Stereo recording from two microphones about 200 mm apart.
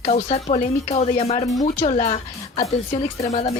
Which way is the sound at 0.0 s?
30° left (ahead or behind).